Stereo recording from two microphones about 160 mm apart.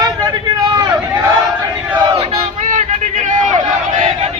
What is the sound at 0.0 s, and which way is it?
Vehicle, 25° right (ahead or behind).